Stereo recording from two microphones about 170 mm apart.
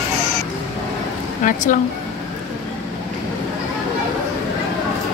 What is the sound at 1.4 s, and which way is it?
Speech, 50° left (ahead or behind).